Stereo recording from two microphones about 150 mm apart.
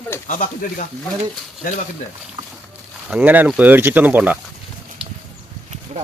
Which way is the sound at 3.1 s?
10° right (ahead or behind).